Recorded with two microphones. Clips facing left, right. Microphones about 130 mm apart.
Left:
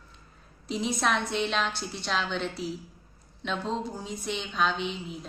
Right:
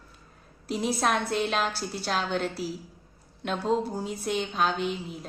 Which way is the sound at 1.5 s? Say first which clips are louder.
Right 1 dB; 45° right (ahead or behind).